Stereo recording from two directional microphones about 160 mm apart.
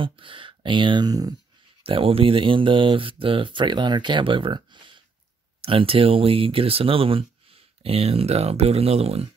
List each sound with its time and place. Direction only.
0.0 s speech: 30° right (ahead or behind)
1.8 s speech: 35° right (ahead or behind)